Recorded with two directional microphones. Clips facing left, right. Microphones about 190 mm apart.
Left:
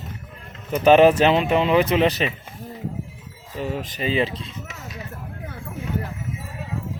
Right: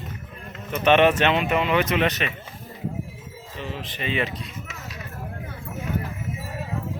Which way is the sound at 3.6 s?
45° left (ahead or behind).